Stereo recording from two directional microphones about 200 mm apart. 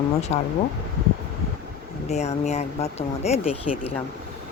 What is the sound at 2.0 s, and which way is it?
Speech, 35° left (ahead or behind).